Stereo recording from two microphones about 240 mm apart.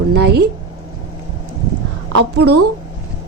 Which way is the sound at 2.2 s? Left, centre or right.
Right.